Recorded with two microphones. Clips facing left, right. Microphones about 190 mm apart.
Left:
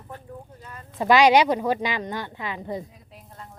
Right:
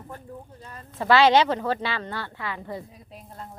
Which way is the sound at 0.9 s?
15° left (ahead or behind).